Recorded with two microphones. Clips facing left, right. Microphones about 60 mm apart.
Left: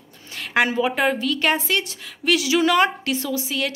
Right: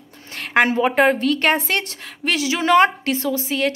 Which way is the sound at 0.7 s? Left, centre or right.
Right.